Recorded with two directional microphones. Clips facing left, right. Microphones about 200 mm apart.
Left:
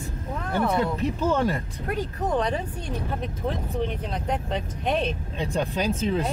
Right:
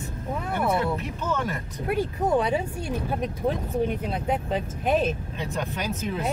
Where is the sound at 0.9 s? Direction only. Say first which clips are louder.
Left 5 dB; 30° left (ahead or behind).